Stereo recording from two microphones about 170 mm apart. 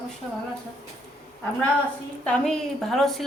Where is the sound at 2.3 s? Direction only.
Centre (ahead or behind).